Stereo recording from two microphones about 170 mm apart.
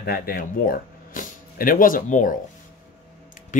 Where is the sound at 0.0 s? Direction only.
65° left (ahead or behind).